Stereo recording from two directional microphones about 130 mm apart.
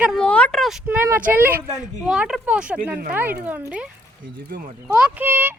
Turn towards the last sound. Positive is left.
turn(degrees=-15)  # may be behind; listen again after turning